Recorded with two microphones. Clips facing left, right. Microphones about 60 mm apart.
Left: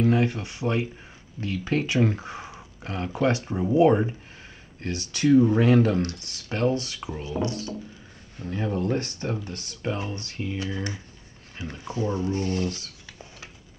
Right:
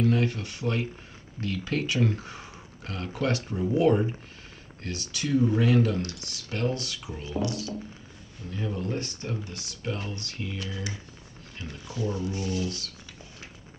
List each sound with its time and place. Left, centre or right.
0.0 s speech: left
9.8 s speech: left
11.7 s speech: left